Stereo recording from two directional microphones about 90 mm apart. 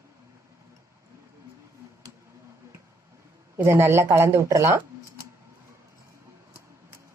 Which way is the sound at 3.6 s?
30° right (ahead or behind).